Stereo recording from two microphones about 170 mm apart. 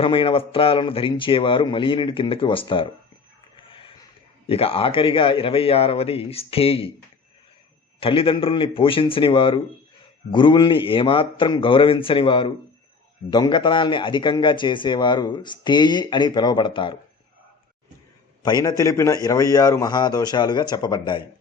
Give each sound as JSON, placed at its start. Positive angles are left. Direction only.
{"t": 0.0, "sound": "a man's voice", "side_deg": 30}
{"t": 3.6, "sound": "a sound", "side_deg": 30}
{"t": 4.4, "sound": "a man's voice", "side_deg": 35}
{"t": 7.9, "sound": "a man's voice", "side_deg": 30}
{"t": 18.4, "sound": "a man's voice", "side_deg": 20}